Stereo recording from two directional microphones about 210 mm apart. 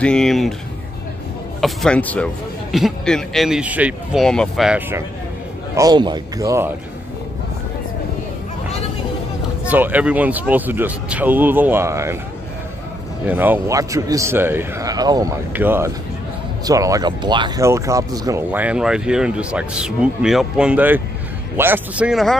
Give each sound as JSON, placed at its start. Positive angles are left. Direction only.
{"t": 0.0, "sound": "a man's voice", "side_deg": 5}
{"t": 1.6, "sound": "a man's voice", "side_deg": 5}
{"t": 5.8, "sound": "speech", "side_deg": -20}
{"t": 9.7, "sound": "speech", "side_deg": -10}
{"t": 13.3, "sound": "a man's voice", "side_deg": -10}